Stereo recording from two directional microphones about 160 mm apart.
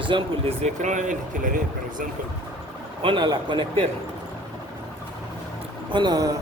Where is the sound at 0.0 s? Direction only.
35° right (ahead or behind); by 1.5 s 50° right (ahead or behind).